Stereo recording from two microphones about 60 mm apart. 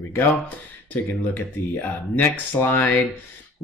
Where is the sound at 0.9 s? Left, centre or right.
Left.